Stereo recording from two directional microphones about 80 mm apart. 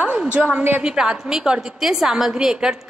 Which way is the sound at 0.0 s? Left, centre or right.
Centre.